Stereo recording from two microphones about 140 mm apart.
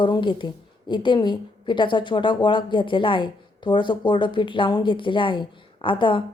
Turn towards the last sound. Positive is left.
turn(degrees=35)  # may be behind; listen again after turning